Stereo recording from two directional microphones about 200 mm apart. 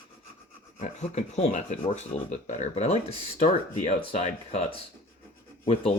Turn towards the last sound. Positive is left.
turn(degrees=30)  # may be behind; listen again after turning